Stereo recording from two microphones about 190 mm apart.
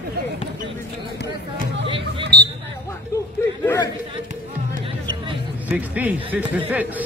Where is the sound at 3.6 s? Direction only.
15° left (ahead or behind).